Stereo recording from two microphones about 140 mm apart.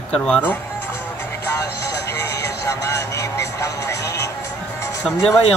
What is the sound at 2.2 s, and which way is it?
Vehicle, 20° left (ahead or behind).